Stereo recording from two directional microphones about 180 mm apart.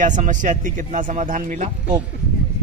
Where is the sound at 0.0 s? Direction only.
45° right (ahead or behind).